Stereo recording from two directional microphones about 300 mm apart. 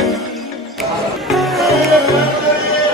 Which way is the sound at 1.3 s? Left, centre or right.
Centre.